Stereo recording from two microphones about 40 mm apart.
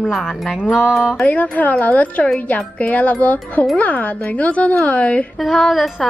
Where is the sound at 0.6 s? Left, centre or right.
Centre.